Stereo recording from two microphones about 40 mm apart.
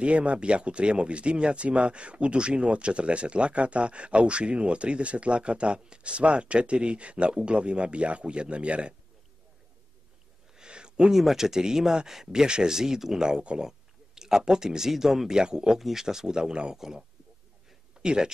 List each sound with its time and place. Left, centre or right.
0.0 s speech: right
10.5 s a sound: right
11.1 s speech: centre
13.4 s speech: right
13.7 s speech: centre
16.7 s speech: centre
18.0 s speech: right